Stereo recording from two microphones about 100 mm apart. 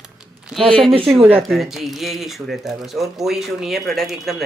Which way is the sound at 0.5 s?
5° right (ahead or behind).